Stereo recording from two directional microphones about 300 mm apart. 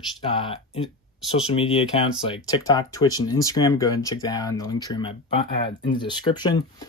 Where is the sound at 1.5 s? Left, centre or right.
Centre.